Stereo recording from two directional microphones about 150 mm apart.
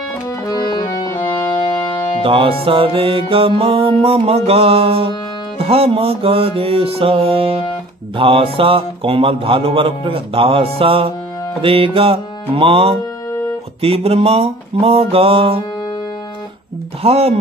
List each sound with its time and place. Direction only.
0.5 s accordion: 30° left (ahead or behind)
1.1 s music: 30° left (ahead or behind)
2.2 s music: 35° right (ahead or behind)
17.0 s speech: 40° right (ahead or behind)